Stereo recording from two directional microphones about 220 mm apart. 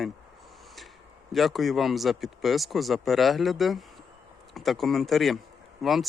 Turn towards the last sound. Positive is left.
turn(degrees=0)  # may be behind; listen again after turning